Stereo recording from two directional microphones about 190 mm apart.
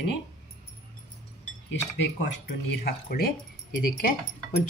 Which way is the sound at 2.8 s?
50° left (ahead or behind).